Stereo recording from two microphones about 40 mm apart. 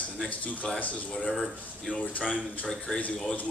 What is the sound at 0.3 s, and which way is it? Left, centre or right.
A man's voice, left.